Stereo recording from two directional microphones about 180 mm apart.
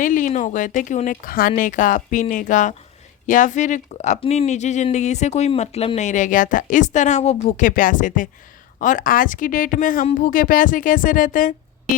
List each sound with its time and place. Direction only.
0.0 s speech: 45° left (ahead or behind)